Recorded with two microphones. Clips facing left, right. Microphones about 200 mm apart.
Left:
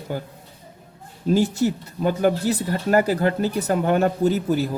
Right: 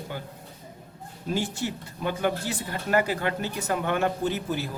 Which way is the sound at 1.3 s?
40° left (ahead or behind).